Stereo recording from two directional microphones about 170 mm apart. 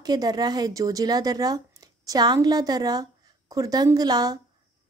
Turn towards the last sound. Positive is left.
turn(degrees=-20)  # may be behind; listen again after turning